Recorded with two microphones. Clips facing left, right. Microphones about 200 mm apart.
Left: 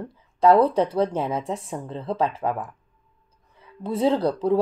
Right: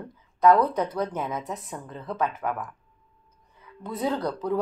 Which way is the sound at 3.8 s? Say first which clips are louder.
Left 6 dB; 30° left (ahead or behind).